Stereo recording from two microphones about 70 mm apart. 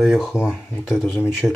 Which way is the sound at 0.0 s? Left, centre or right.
Centre.